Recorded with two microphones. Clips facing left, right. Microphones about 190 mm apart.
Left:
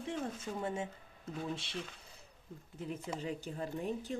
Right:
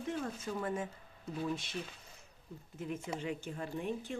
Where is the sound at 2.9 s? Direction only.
35° left (ahead or behind).